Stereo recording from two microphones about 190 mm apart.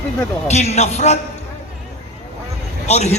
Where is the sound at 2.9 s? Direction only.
35° left (ahead or behind).